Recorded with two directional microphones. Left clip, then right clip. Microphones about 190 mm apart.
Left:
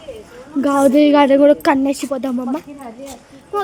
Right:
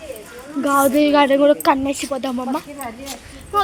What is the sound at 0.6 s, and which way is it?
A woman's voice, 70° left (ahead or behind).